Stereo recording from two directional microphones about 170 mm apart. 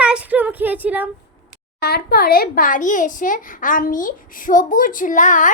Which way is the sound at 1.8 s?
65° left (ahead or behind).